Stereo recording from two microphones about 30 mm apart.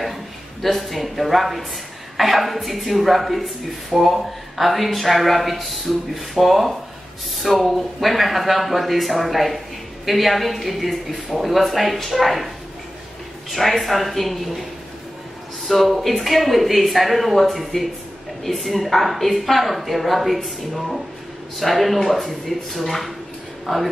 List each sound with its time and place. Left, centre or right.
0.0 s a sound: centre
0.7 s speech: centre
13.5 s a man's voice: centre